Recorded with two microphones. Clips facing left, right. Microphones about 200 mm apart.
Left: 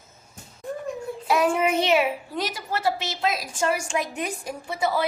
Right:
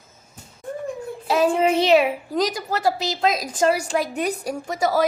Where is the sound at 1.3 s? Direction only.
30° right (ahead or behind).